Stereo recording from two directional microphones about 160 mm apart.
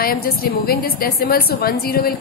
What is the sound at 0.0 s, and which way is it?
A woman's voice, 70° left (ahead or behind).